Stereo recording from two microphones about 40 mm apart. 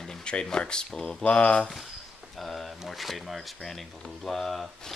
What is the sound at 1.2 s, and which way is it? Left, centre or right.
Speech, left.